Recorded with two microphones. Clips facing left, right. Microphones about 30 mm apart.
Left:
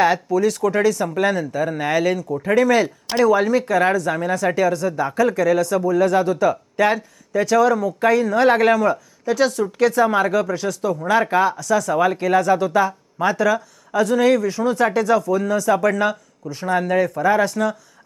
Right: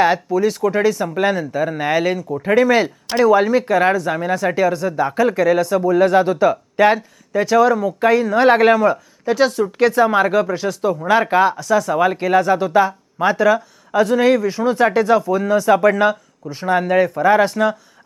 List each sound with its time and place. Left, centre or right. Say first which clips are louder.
0.0 s speech: right 1 dB; centre